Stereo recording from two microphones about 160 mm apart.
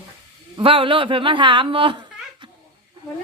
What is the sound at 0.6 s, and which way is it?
A woman's voice, 35° right (ahead or behind).